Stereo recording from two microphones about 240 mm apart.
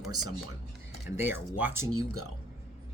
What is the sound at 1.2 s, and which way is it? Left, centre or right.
Speech, centre.